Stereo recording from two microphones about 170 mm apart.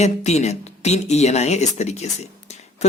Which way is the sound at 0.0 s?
40° left (ahead or behind).